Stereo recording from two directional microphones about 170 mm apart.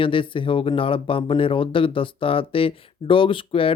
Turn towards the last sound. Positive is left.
turn(degrees=30)  # may be behind; listen again after turning